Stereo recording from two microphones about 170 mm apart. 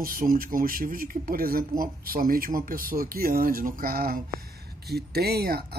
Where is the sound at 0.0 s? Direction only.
55° right (ahead or behind).